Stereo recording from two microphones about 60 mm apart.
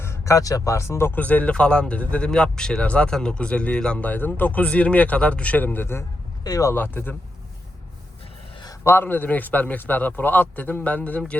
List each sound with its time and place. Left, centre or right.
0.0 s a sound: left
0.3 s speech: left
1.1 s speech: left
6.4 s speech: left
6.7 s speech: left
8.8 s a man's voice: left
9.0 s speech: left